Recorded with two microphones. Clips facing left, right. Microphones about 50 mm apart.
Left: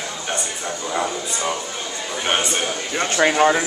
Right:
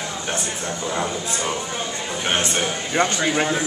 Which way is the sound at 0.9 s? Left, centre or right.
Centre.